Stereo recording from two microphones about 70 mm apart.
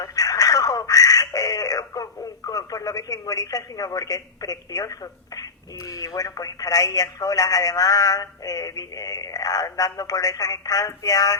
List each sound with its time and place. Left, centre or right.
0.0 s telephone: left
0.9 s a sound: left
2.5 s speech: left